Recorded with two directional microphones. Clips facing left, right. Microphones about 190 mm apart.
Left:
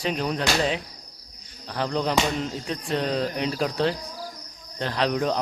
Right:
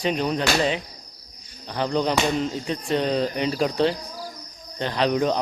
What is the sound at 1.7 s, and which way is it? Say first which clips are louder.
Speech: right 3 dB; centre (ahead or behind).